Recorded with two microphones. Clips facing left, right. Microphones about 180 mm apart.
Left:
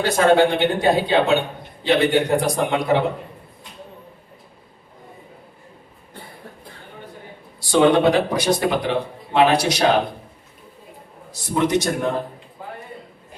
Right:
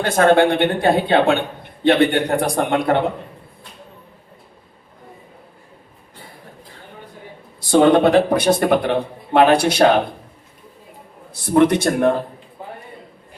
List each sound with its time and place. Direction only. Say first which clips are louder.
0.0 s speech: right 2 dB; 55° right (ahead or behind)
7.7 s a man's voice: right 3 dB; 50° right (ahead or behind)
11.5 s speech: right 5 dB; 60° right (ahead or behind)